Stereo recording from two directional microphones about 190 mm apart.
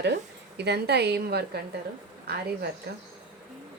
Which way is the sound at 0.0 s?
65° right (ahead or behind).